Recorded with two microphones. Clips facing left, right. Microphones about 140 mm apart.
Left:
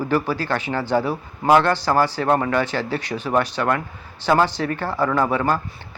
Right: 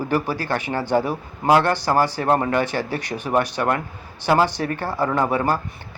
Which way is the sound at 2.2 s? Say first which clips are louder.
Even; 25° right (ahead or behind).